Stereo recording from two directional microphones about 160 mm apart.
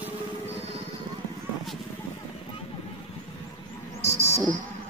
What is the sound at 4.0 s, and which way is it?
Frog, 15° left (ahead or behind).